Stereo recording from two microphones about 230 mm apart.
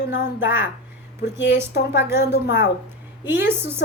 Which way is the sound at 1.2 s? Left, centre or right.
Left.